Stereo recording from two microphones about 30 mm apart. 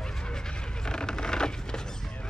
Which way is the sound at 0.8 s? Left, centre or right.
Left.